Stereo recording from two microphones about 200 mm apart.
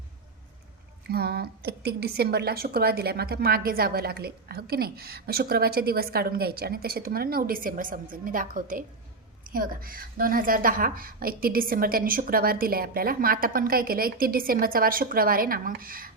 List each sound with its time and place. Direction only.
1.1 s a woman's voice: 50° right (ahead or behind)